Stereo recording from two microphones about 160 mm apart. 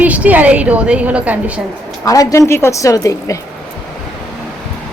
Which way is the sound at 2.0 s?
20° left (ahead or behind).